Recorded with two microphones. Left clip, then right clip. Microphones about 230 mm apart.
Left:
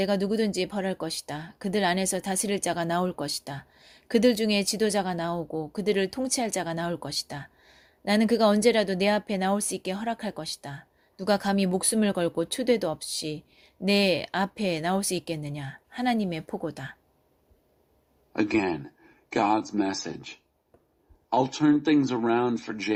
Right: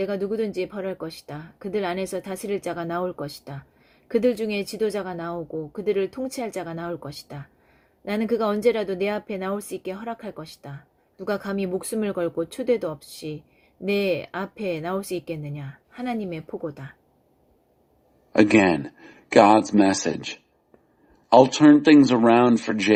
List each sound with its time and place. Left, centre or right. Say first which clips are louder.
0.0 s a woman's voice: even; left
18.3 s a man's voice: right 9 dB; right